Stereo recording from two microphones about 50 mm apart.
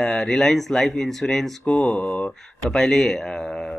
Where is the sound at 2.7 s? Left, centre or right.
Centre.